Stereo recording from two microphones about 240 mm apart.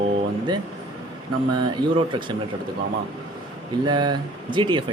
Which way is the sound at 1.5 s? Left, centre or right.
Centre.